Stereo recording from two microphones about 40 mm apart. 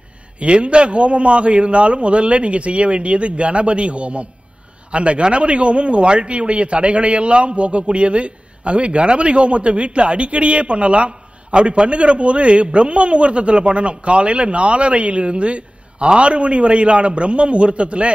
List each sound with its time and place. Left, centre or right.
0.4 s a man's voice: right